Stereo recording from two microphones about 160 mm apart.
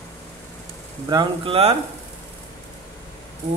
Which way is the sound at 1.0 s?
30° right (ahead or behind).